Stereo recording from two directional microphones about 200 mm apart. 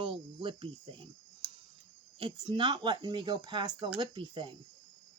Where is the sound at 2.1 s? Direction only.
25° right (ahead or behind).